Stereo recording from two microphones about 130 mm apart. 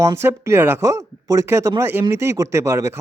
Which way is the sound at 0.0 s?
20° right (ahead or behind).